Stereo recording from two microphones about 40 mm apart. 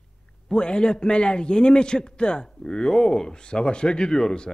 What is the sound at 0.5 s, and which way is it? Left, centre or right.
A man's voice, left.